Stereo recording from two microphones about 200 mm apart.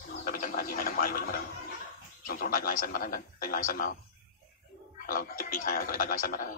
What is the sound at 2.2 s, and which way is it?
Speech, 45° left (ahead or behind).